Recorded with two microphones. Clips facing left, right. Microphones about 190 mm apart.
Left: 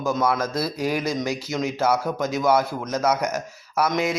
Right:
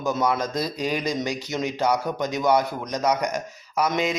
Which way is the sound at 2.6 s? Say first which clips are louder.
Left 2 dB; 15° right (ahead or behind).